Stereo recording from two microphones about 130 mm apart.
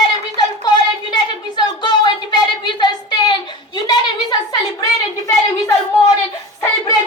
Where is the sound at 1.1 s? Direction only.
35° left (ahead or behind).